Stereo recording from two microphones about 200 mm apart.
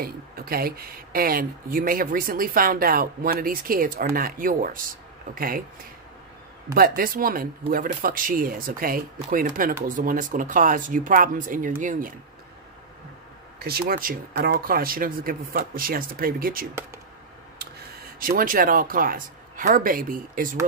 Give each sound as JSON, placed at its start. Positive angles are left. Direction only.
{"t": 0.0, "sound": "speech", "side_deg": -50}
{"t": 6.7, "sound": "speech", "side_deg": -45}
{"t": 13.6, "sound": "speech", "side_deg": -50}
{"t": 18.2, "sound": "speech", "side_deg": -45}